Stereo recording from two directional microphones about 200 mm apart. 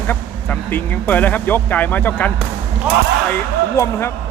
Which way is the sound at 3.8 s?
10° left (ahead or behind).